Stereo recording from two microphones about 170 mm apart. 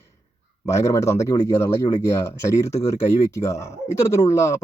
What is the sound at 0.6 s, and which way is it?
Speech, 15° left (ahead or behind).